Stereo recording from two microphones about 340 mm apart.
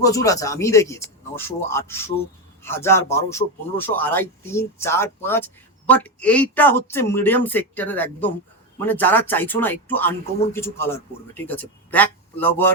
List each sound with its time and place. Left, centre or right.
0.0 s speech: centre